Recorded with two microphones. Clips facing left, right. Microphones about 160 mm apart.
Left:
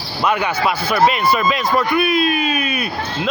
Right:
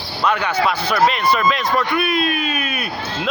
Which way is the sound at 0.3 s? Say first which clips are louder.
Even; 5° left (ahead or behind).